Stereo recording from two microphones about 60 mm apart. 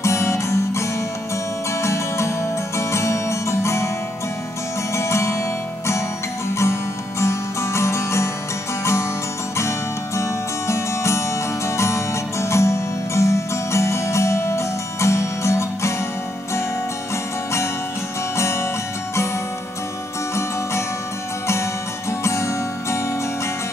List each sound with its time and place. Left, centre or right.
0.0 s music: left
4.9 s music: left
6.5 s music: left
9.6 s music: left
18.3 s music: left
22.2 s music: left